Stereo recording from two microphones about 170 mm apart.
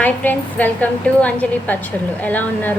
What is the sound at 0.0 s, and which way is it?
A woman's voice, 10° left (ahead or behind).